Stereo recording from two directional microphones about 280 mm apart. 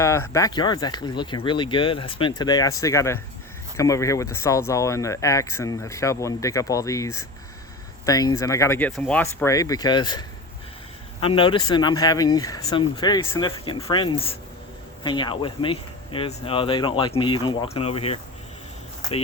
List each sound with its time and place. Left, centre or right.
0.0 s speech: centre